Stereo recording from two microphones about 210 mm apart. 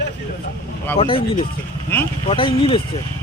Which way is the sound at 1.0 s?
25° left (ahead or behind).